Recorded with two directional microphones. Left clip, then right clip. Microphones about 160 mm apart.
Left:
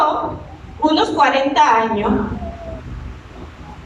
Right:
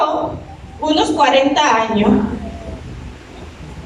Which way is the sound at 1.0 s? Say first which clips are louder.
Right 3 dB; 20° right (ahead or behind).